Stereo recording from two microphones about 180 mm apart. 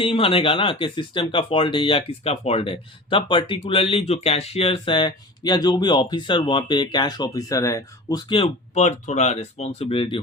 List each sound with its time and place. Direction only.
0.0 s speech: 30° left (ahead or behind)